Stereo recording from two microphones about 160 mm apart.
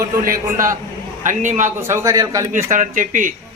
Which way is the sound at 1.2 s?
50° right (ahead or behind).